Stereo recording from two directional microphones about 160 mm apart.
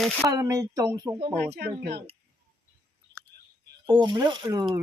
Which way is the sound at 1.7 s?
90° right.